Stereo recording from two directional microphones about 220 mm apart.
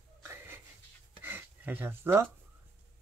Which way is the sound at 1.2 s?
10° right (ahead or behind).